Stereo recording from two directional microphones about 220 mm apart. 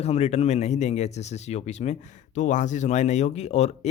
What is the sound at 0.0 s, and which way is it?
Speech, 30° left (ahead or behind).